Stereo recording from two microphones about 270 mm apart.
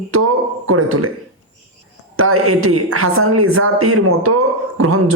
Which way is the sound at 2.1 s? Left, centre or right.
Right.